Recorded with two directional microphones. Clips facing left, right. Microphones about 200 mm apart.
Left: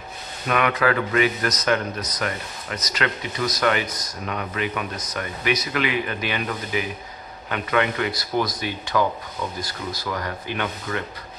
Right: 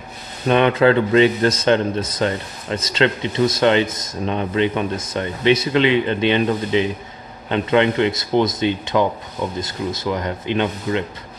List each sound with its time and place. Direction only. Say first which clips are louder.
0.5 s speech: right 7 dB; 30° right (ahead or behind)